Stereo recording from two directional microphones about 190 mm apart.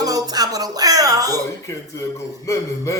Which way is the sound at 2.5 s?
15° left (ahead or behind).